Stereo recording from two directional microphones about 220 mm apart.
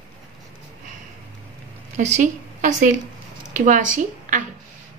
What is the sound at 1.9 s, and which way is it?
A woman's voice, 35° right (ahead or behind).